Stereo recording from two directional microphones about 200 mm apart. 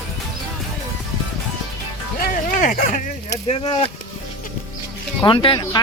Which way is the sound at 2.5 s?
40° left (ahead or behind).